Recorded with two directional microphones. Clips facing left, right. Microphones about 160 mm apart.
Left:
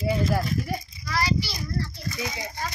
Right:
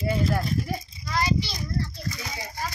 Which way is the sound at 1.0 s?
20° right (ahead or behind).